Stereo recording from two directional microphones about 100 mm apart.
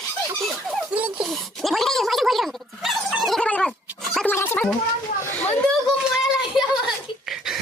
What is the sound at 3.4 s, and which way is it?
Goat, 10° left (ahead or behind).